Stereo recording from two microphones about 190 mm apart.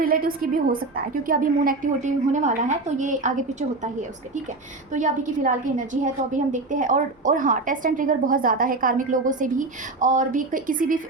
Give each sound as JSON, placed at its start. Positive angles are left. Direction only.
{"t": 0.0, "sound": "a woman's voice", "side_deg": -50}
{"t": 4.9, "sound": "a woman's voice", "side_deg": -40}